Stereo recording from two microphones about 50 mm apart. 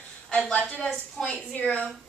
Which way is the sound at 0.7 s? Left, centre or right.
Centre.